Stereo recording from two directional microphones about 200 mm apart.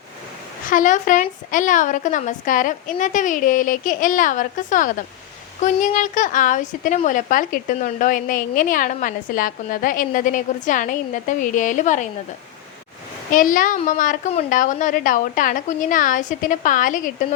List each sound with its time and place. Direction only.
0.7 s a woman's voice: 40° left (ahead or behind)
13.3 s a woman's voice: 40° left (ahead or behind)